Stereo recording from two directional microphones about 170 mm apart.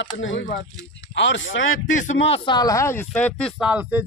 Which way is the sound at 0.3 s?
90° left.